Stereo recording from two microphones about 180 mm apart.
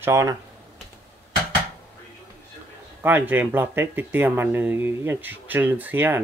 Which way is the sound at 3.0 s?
10° right (ahead or behind).